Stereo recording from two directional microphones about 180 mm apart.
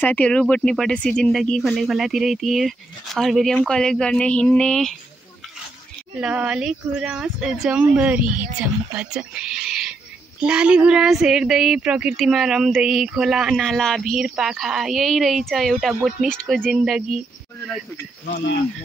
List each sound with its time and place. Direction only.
0.0 s speech: 10° left (ahead or behind)
6.1 s a woman's voice: 5° right (ahead or behind)
18.2 s speech: 65° left (ahead or behind)